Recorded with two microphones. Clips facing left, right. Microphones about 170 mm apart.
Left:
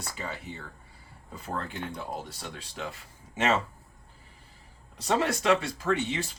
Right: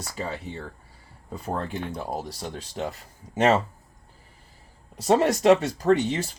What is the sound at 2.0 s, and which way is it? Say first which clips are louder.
Speech: right 5 dB; 40° right (ahead or behind).